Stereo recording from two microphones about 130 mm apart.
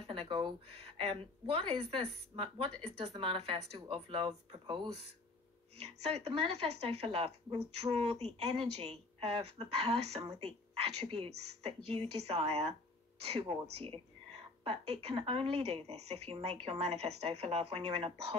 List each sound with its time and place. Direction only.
0.1 s a woman's voice: 40° right (ahead or behind)